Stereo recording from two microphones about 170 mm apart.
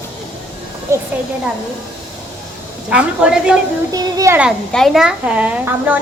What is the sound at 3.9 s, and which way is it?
Speech, 20° right (ahead or behind).